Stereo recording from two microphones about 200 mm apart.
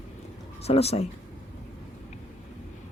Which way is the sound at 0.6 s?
30° left (ahead or behind).